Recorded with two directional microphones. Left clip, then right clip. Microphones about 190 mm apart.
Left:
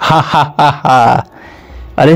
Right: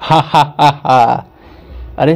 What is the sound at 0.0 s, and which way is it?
A man's voice, 45° left (ahead or behind).